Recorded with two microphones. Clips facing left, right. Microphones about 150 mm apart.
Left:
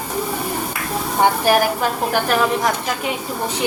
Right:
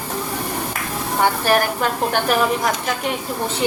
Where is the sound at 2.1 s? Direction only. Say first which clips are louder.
Left 1 dB; centre (ahead or behind).